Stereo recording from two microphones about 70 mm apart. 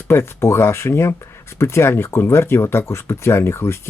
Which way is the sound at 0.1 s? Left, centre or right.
Left.